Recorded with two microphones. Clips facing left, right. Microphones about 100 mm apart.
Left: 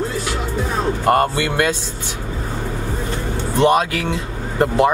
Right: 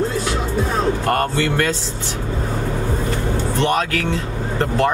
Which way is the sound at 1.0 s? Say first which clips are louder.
Left 3 dB; 15° left (ahead or behind).